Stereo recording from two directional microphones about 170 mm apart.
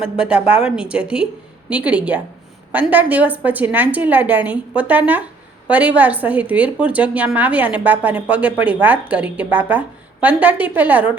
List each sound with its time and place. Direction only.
0.0 s a woman's voice: 5° right (ahead or behind)